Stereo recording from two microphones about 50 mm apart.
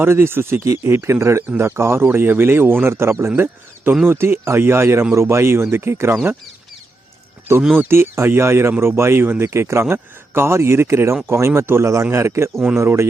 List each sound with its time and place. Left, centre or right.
0.0 s speech: right
1.5 s speech: right
7.9 s speech: right
12.1 s speech: right